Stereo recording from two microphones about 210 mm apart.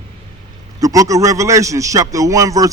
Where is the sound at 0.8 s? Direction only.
15° right (ahead or behind).